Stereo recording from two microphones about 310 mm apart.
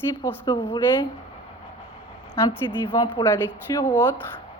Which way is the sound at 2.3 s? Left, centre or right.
Centre.